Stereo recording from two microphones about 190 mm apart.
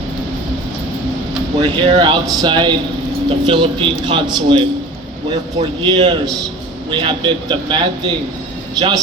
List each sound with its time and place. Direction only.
1.6 s a man's voice: 25° right (ahead or behind)